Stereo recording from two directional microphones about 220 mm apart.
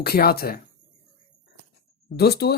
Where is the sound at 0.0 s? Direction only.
45° left (ahead or behind).